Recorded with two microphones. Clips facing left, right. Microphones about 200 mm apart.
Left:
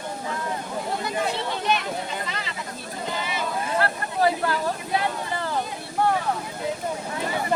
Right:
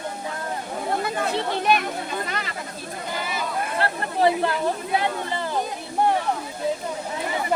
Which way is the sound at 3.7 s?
25° right (ahead or behind).